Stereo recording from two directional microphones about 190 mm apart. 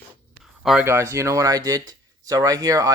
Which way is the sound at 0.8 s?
15° right (ahead or behind).